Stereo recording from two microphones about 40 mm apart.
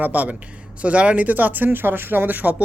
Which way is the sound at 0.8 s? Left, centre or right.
Right.